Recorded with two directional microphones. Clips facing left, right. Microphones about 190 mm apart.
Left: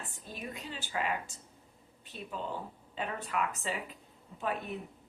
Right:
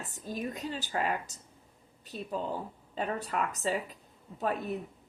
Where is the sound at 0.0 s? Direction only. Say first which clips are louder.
Right 7 dB; 40° right (ahead or behind).